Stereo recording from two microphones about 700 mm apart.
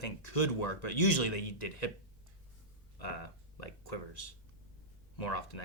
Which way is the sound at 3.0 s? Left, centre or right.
Left.